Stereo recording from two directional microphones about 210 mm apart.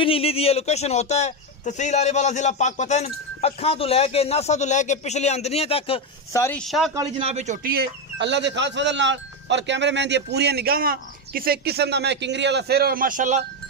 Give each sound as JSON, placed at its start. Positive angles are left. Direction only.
{"t": 0.0, "sound": "speech", "side_deg": 25}
{"t": 6.3, "sound": "speech", "side_deg": 10}
{"t": 6.6, "sound": "speech", "side_deg": 0}
{"t": 7.2, "sound": "a man's voice", "side_deg": -30}
{"t": 7.7, "sound": "speech", "side_deg": -50}